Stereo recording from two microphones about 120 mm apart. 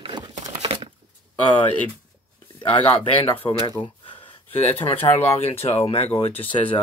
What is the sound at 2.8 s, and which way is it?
Speech, 15° left (ahead or behind).